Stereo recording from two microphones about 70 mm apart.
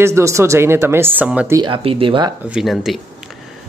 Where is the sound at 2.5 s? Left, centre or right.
Centre.